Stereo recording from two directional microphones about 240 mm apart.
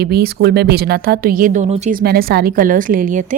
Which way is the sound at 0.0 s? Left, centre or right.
Right.